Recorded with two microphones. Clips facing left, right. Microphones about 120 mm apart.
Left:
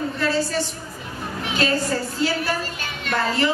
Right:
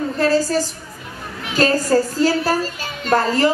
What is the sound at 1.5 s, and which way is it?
A woman's voice, 40° right (ahead or behind).